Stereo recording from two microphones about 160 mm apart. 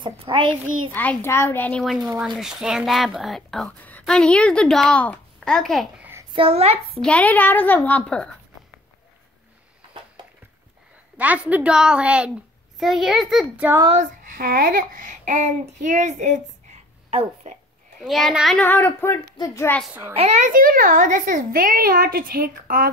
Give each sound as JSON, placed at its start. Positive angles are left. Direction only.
{"t": 0.0, "sound": "a child's voice", "side_deg": -30}
{"t": 1.2, "sound": "a woman's voice", "side_deg": 15}
{"t": 6.3, "sound": "a child's voice", "side_deg": -40}
{"t": 7.0, "sound": "a woman's voice", "side_deg": 5}
{"t": 11.1, "sound": "a woman's voice", "side_deg": -10}
{"t": 14.3, "sound": "child singing", "side_deg": -65}
{"t": 17.1, "sound": "speech", "side_deg": -40}
{"t": 18.0, "sound": "a woman's voice", "side_deg": 0}
{"t": 19.9, "sound": "a woman's voice", "side_deg": -15}
{"t": 20.2, "sound": "a child's voice", "side_deg": -45}